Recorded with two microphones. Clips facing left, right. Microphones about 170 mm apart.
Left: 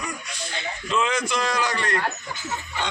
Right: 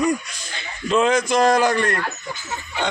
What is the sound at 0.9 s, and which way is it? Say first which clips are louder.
A man's voice: right 7 dB; 40° right (ahead or behind).